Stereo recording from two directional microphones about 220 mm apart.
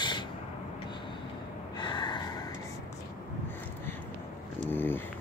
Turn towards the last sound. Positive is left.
turn(degrees=10)  # may be behind; listen again after turning